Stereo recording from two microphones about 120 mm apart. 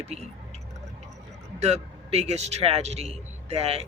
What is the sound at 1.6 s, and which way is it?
A man's voice, 65° right (ahead or behind).